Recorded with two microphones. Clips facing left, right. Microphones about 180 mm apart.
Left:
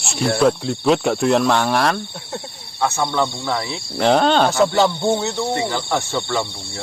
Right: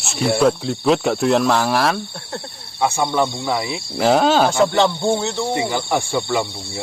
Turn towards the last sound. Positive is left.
turn(degrees=-10)  # may be behind; listen again after turning